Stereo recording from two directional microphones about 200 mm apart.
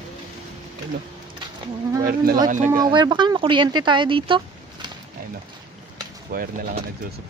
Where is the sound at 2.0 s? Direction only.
45° right (ahead or behind).